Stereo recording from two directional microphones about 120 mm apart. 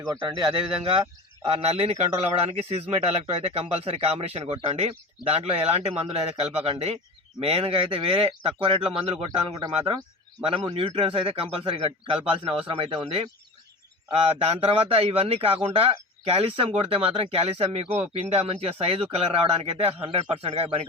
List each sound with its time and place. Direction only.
0.0 s a man's voice: 35° right (ahead or behind)
9.6 s speech: 35° right (ahead or behind)
10.4 s a man's voice: 50° right (ahead or behind)